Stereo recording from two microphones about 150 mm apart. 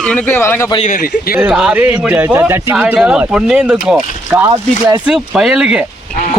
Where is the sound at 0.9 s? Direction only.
70° left (ahead or behind).